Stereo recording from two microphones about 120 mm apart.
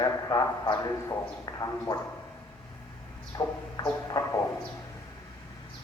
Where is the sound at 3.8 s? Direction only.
30° left (ahead or behind).